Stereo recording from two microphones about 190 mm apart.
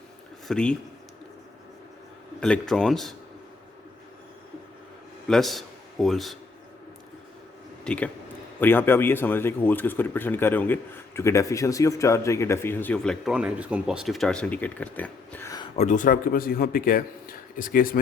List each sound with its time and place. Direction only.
0.4 s speech: 5° left (ahead or behind)
2.4 s speech: 5° left (ahead or behind)
5.3 s a man's voice: centre (ahead or behind)
7.9 s speech: 5° left (ahead or behind)
15.8 s a man's voice: 40° left (ahead or behind)